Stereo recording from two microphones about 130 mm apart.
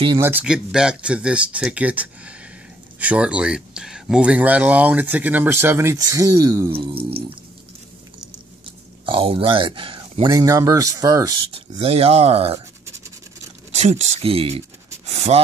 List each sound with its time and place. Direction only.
0.2 s speech: 15° right (ahead or behind)
6.7 s speech: 45° right (ahead or behind)
9.0 s speech: 45° right (ahead or behind)
10.3 s speech: 25° right (ahead or behind)
11.5 s speech: 50° right (ahead or behind)
13.7 s speech: 60° right (ahead or behind)